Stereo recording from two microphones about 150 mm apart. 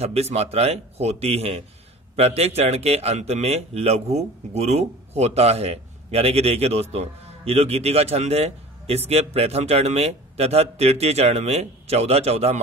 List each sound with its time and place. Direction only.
0.0 s speech: 45° right (ahead or behind)